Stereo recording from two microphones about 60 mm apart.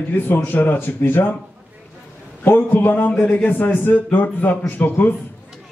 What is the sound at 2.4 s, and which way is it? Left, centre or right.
A man's voice, left.